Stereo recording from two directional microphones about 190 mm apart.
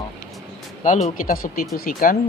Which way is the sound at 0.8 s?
40° left (ahead or behind).